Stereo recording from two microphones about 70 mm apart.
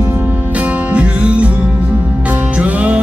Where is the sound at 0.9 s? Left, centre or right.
Centre.